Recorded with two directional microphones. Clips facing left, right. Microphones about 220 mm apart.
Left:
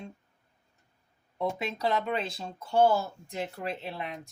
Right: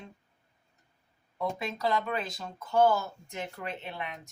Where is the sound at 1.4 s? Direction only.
20° left (ahead or behind).